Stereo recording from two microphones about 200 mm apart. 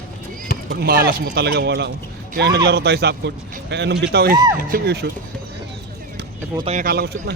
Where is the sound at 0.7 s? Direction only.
50° right (ahead or behind).